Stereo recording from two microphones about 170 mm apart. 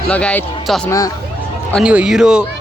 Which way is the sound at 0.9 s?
20° left (ahead or behind).